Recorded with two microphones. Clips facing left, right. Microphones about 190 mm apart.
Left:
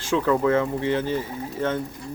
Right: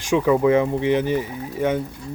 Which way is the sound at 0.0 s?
15° right (ahead or behind).